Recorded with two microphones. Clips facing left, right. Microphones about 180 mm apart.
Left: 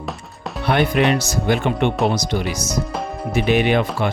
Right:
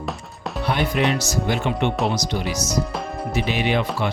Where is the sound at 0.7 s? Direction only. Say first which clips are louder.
Left 5 dB; 65° left (ahead or behind).